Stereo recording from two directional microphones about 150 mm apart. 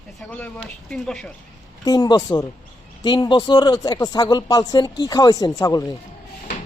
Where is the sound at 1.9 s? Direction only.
25° left (ahead or behind).